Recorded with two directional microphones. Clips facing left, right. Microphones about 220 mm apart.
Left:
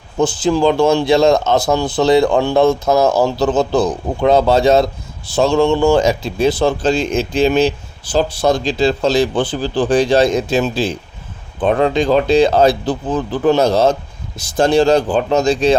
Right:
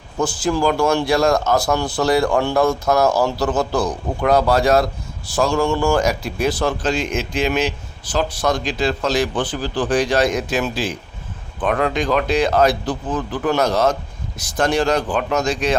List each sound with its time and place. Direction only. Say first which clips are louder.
0.2 s speech: left 5 dB; 20° left (ahead or behind)